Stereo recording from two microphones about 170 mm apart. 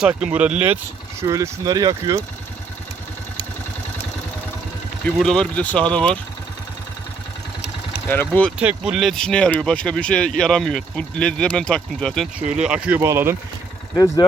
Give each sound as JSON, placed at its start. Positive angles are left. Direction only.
{"t": 0.0, "sound": "speech", "side_deg": -5}
{"t": 1.3, "sound": "speech", "side_deg": -20}
{"t": 5.0, "sound": "speech", "side_deg": 5}
{"t": 8.1, "sound": "speech", "side_deg": 10}
{"t": 8.5, "sound": "speech", "side_deg": -5}
{"t": 13.9, "sound": "speech", "side_deg": 20}